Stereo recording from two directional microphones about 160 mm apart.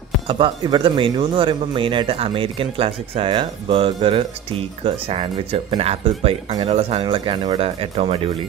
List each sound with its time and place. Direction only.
0.3 s speech: 30° right (ahead or behind)